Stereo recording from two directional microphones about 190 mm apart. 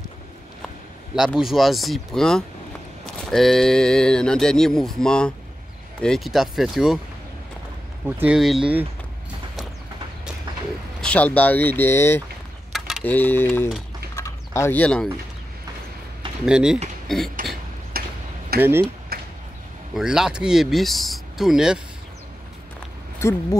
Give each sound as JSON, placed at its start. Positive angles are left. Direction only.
{"t": 1.1, "sound": "speech", "side_deg": 0}
{"t": 8.2, "sound": "speech", "side_deg": -5}
{"t": 11.0, "sound": "speech", "side_deg": 5}
{"t": 12.7, "sound": "a sound", "side_deg": 0}
{"t": 13.0, "sound": "speech", "side_deg": 10}
{"t": 14.1, "sound": "a sound", "side_deg": 15}
{"t": 16.4, "sound": "speech", "side_deg": -5}
{"t": 17.4, "sound": "a sound", "side_deg": -45}
{"t": 18.6, "sound": "speech", "side_deg": -10}
{"t": 19.1, "sound": "a sound", "side_deg": -55}
{"t": 20.0, "sound": "speech", "side_deg": -5}
{"t": 23.1, "sound": "speech", "side_deg": 15}